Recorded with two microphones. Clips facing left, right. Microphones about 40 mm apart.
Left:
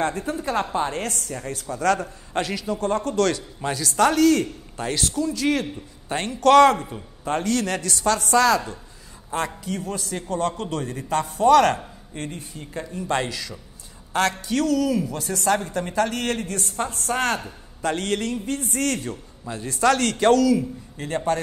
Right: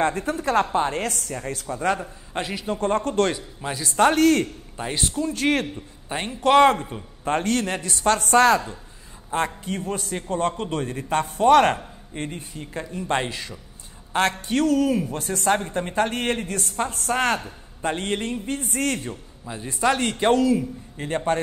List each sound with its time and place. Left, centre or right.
0.0 s speech: right
1.7 s a man's voice: right
2.0 s a man's voice: centre
2.6 s speech: right
3.6 s speech: right
6.0 s a man's voice: centre; by 16.7 s right
17.8 s a man's voice: right
19.4 s a man's voice: centre